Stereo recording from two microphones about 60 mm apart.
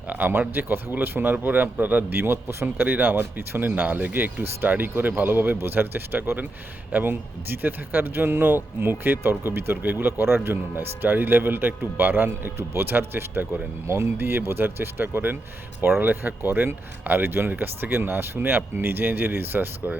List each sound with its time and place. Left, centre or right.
0.1 s speech: right
2.8 s speech: right